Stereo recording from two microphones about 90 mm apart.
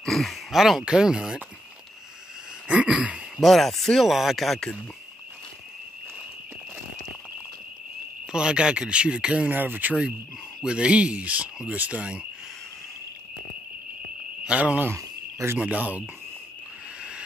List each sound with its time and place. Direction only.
0.0 s speech: 5° left (ahead or behind)
2.7 s speech: 15° right (ahead or behind)
3.3 s speech: centre (ahead or behind)
8.3 s speech: 10° right (ahead or behind)
14.4 s speech: 15° right (ahead or behind)
15.0 s cricket: 30° right (ahead or behind)
15.6 s speech: 15° right (ahead or behind)